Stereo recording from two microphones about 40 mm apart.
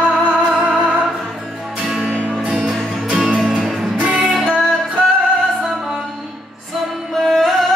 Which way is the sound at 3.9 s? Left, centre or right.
Right.